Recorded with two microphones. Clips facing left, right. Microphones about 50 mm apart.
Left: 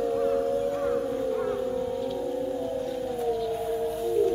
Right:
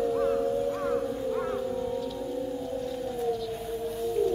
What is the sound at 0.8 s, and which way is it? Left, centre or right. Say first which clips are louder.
Music: left 2 dB; centre.